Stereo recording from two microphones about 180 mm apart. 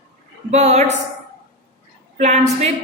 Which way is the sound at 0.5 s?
40° right (ahead or behind).